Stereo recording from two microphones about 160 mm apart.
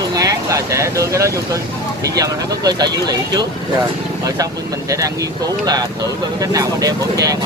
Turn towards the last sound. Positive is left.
turn(degrees=-20)  # may be behind; listen again after turning